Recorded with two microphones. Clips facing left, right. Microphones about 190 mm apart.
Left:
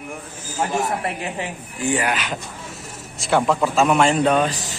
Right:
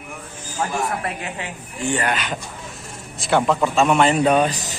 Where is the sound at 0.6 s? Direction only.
25° left (ahead or behind).